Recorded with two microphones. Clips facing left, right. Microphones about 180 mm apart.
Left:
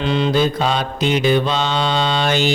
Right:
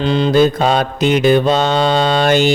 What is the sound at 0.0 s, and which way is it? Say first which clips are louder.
Mantra: right 5 dB; 35° right (ahead or behind).